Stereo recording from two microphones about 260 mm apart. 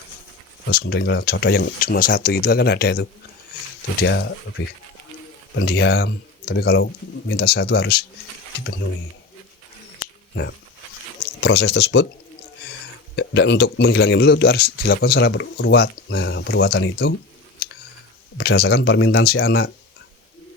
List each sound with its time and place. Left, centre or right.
0.7 s speech: left
10.0 s a sound: left
11.3 s speech: left
13.1 s speech: left
18.3 s speech: left